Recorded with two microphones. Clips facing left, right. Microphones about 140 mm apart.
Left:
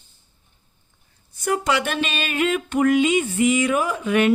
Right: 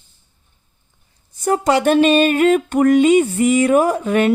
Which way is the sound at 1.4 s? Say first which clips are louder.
Right 7 dB; 35° right (ahead or behind).